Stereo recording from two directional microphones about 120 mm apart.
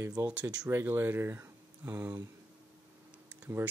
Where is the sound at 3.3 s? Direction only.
15° right (ahead or behind).